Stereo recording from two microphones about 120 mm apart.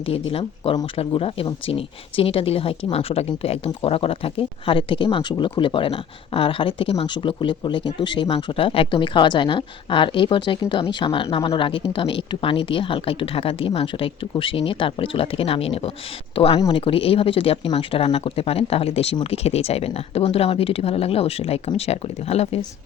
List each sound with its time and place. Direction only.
0.1 s speech: 50° left (ahead or behind)
16.6 s speech: 40° left (ahead or behind); by 22.6 s 60° left (ahead or behind)